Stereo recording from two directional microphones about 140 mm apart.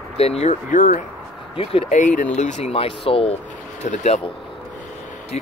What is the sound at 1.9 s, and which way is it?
Speech, 65° left (ahead or behind).